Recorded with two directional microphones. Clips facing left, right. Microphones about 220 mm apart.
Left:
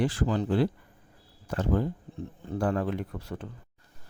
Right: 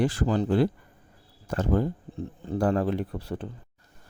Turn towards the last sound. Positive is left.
turn(degrees=-30)  # may be behind; listen again after turning